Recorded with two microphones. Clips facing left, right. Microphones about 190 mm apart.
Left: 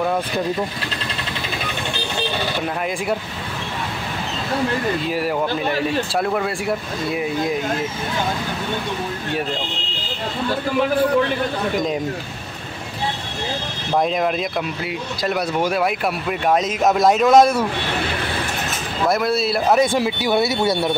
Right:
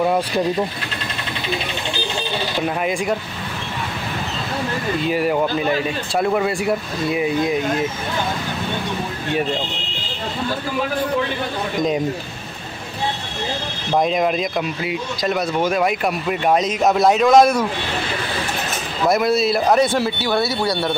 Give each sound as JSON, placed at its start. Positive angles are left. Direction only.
{"t": 5.1, "sound": "speech", "side_deg": 0}
{"t": 14.0, "sound": "speech", "side_deg": 0}
{"t": 19.0, "sound": "speech", "side_deg": 0}